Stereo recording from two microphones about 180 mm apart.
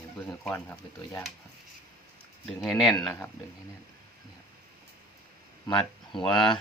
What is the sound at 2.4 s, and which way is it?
Speech, centre (ahead or behind).